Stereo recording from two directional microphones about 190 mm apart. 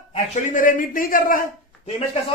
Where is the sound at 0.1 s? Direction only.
45° left (ahead or behind).